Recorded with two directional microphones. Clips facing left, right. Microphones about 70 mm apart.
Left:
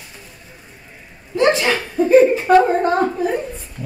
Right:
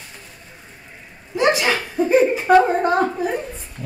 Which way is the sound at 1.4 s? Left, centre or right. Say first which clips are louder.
Left 2 dB; centre.